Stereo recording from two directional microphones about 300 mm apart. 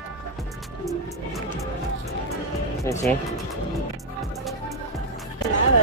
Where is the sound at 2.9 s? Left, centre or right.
Centre.